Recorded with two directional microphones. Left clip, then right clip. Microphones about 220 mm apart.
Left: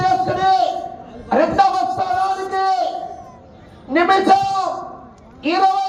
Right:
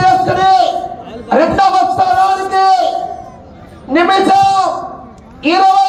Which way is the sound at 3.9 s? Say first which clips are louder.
Right 4 dB; 20° right (ahead or behind).